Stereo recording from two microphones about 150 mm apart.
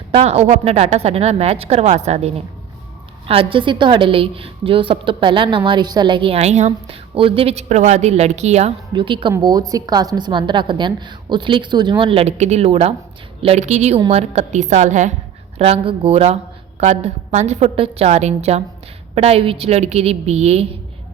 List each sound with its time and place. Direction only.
0.1 s speech: 45° right (ahead or behind)
3.2 s a woman's voice: 35° right (ahead or behind)
8.9 s a woman's voice: 35° right (ahead or behind); by 15.1 s 55° right (ahead or behind)
15.5 s speech: 40° right (ahead or behind)